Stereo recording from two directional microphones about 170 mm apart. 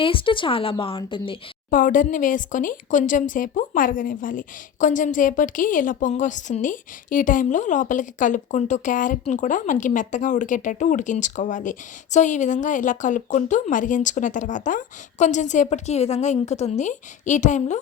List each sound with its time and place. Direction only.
0.0 s speech: 30° left (ahead or behind)
1.7 s speech: 50° left (ahead or behind)